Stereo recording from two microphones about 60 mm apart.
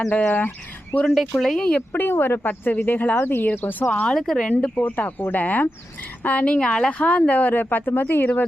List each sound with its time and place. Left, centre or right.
0.1 s speech: left
1.4 s speech: centre
1.9 s speech: left
3.2 s speech: left
4.1 s speech: centre
4.7 s speech: left; by 6.9 s centre
7.0 s speech: left